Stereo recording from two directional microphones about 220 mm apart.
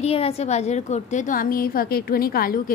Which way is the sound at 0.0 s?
25° left (ahead or behind).